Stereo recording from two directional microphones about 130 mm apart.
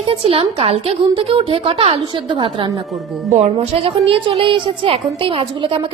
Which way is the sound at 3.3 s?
55° right (ahead or behind).